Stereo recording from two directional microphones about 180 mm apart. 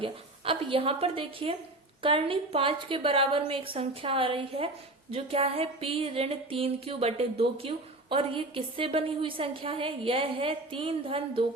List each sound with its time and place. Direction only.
0.0 s a woman's voice: 30° right (ahead or behind)